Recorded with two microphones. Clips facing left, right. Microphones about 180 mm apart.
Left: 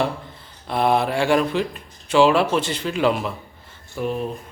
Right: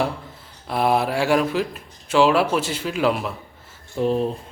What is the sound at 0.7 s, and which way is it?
A man's voice, 5° right (ahead or behind).